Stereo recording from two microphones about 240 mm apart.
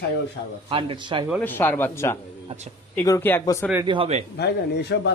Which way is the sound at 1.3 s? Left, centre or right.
Centre.